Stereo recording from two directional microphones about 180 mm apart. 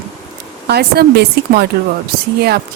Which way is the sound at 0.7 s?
60° right (ahead or behind).